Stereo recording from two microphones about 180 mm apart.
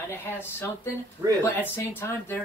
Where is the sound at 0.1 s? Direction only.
10° left (ahead or behind).